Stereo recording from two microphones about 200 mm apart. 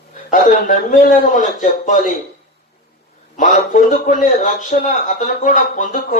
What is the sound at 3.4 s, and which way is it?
A man's voice, 40° left (ahead or behind).